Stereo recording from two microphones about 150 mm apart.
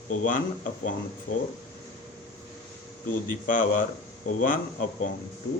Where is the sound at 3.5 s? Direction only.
60° left (ahead or behind).